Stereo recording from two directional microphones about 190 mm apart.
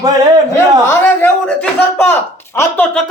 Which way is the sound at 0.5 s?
10° left (ahead or behind).